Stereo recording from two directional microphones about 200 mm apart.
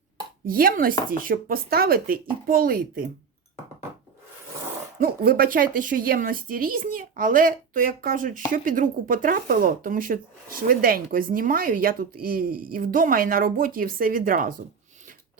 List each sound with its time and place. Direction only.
0.4 s speech: 45° right (ahead or behind)
4.9 s speech: 45° right (ahead or behind)